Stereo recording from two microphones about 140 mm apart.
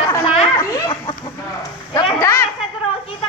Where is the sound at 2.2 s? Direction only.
25° left (ahead or behind).